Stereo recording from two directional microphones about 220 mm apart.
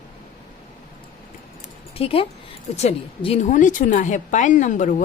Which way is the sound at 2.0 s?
25° left (ahead or behind).